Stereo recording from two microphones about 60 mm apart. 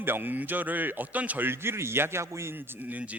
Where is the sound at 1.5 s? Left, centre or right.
Right.